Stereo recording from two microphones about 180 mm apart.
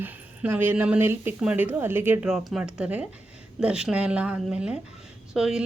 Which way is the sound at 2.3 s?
Centre (ahead or behind).